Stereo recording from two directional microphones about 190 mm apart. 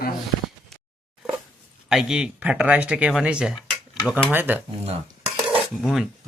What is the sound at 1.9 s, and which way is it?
Speech, 5° right (ahead or behind).